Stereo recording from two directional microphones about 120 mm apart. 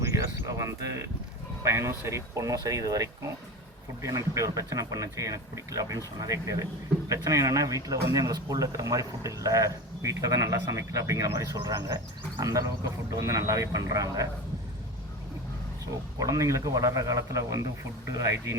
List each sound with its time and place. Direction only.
0.0 s speech: 25° right (ahead or behind)
16.2 s speech: 25° right (ahead or behind)